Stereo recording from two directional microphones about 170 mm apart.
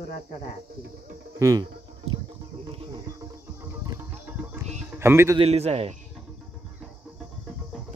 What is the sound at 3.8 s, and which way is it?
Music, 15° right (ahead or behind).